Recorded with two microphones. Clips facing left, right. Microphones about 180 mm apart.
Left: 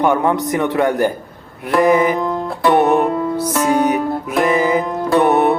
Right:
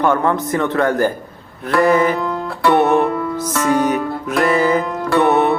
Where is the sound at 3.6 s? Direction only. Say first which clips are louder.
Even; 15° left (ahead or behind).